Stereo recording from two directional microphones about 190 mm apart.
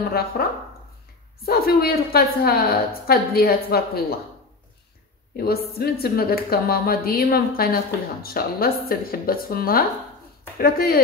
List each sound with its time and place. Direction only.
0.1 s speech: 55° left (ahead or behind)
5.3 s speech: 55° left (ahead or behind)